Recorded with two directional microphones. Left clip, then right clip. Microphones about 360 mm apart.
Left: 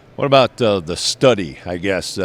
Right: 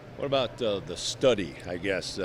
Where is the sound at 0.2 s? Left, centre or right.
Left.